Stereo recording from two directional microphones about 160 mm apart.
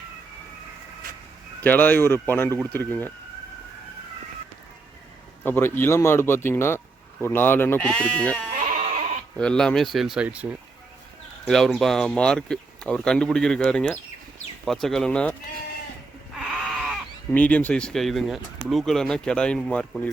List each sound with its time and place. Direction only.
1.6 s speech: 10° left (ahead or behind)
5.4 s speech: 15° left (ahead or behind)
8.8 s sheep: 45° right (ahead or behind)
9.4 s speech: 5° left (ahead or behind)
16.4 s a sound: centre (ahead or behind)
17.3 s speech: 10° left (ahead or behind)